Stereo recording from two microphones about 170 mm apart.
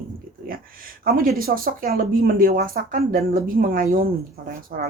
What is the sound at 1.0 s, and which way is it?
Speech, 55° right (ahead or behind).